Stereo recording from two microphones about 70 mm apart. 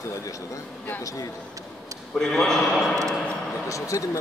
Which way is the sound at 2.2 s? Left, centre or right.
Centre.